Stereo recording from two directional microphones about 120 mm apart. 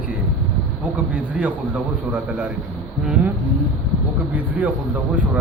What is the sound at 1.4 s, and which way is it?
Speech, 10° right (ahead or behind).